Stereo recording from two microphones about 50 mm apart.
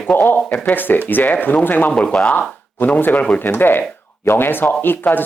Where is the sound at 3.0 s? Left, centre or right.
Left.